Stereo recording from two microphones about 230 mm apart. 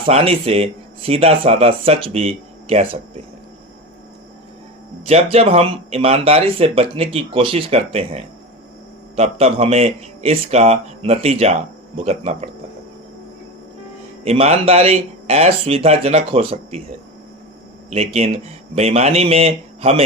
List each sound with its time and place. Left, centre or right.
0.0 s speech: right
5.0 s speech: right
14.3 s speech: right
17.9 s speech: right